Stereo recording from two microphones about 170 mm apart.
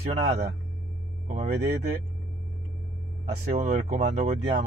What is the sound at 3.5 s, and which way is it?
Speech, 45° right (ahead or behind).